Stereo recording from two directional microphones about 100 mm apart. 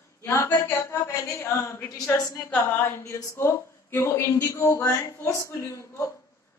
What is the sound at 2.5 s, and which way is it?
A woman's voice, 20° left (ahead or behind).